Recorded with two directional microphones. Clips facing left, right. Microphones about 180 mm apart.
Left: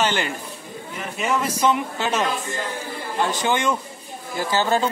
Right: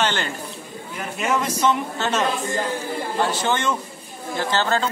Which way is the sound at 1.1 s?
Centre (ahead or behind).